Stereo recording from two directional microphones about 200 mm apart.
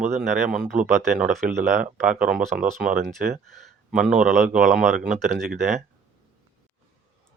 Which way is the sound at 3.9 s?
40° right (ahead or behind).